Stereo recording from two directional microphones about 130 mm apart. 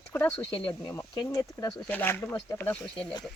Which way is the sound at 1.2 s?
25° left (ahead or behind).